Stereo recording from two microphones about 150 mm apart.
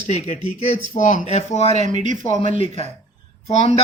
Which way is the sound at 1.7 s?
50° right (ahead or behind).